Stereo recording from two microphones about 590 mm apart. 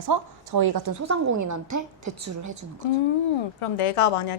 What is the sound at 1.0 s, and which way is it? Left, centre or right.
A woman's voice, right.